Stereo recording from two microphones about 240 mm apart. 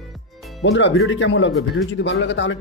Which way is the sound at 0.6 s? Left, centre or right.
Left.